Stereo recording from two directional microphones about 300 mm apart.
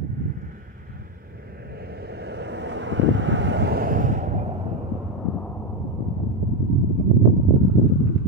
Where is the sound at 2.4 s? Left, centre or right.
Right.